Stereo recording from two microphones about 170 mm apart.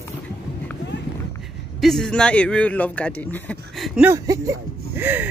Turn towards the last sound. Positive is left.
turn(degrees=-10)  # may be behind; listen again after turning